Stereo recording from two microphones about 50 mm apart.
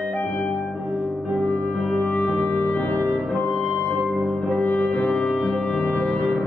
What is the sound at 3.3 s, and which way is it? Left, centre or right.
Music, left.